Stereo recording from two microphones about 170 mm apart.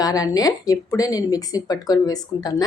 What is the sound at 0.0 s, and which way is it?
A woman's voice, 20° left (ahead or behind).